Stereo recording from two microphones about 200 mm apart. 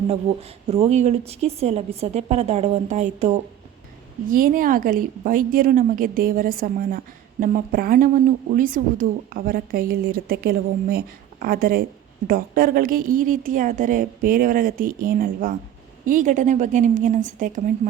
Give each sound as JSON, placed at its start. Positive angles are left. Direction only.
{"t": 0.3, "sound": "a woman's voice", "side_deg": -30}